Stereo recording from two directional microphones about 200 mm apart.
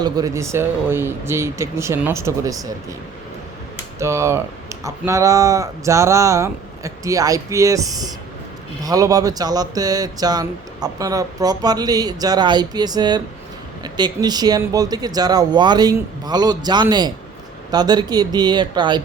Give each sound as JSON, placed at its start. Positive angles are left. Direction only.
{"t": 0.0, "sound": "speech", "side_deg": -20}
{"t": 4.0, "sound": "speech", "side_deg": -15}